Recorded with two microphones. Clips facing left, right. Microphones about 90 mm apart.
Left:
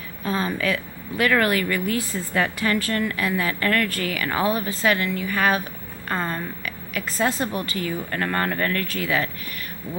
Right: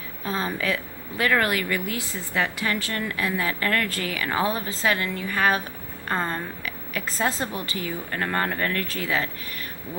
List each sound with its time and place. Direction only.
0.2 s a woman's voice: 25° right (ahead or behind)
8.8 s speech: 25° right (ahead or behind)